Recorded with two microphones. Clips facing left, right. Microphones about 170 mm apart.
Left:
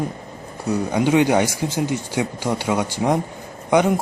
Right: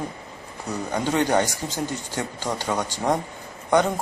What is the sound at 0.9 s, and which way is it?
Speech, 10° left (ahead or behind).